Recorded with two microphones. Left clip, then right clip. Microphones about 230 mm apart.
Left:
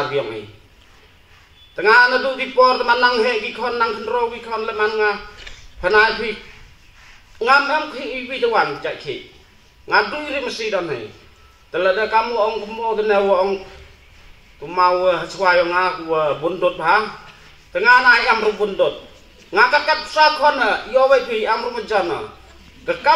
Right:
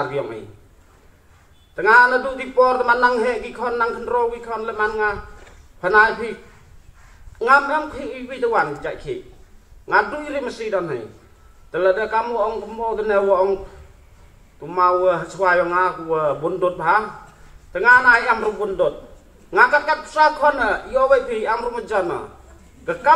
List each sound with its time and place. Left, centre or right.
1.8 s a man's voice: left
7.3 s a man's voice: left
14.6 s a man's voice: left